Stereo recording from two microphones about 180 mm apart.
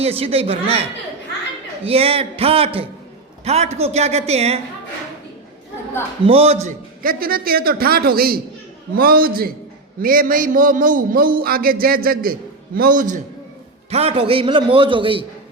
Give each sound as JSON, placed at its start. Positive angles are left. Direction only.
{"t": 0.0, "sound": "a man's voice", "side_deg": -35}
{"t": 6.2, "sound": "a man's voice", "side_deg": -35}
{"t": 7.0, "sound": "a man's voice", "side_deg": -55}
{"t": 13.9, "sound": "a man's voice", "side_deg": -35}